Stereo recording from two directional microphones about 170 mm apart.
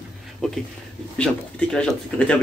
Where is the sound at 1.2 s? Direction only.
5° left (ahead or behind).